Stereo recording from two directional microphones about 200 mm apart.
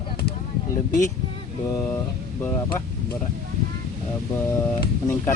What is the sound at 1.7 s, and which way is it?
Speech, 15° left (ahead or behind).